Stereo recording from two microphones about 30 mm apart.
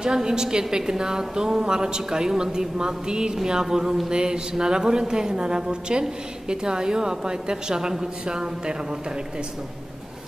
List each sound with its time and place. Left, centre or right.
0.0 s a woman's voice: right